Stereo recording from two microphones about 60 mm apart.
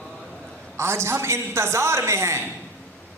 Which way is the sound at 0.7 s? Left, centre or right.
Right.